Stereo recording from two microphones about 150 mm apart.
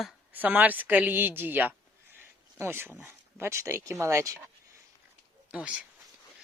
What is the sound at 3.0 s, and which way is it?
Speech, 15° right (ahead or behind).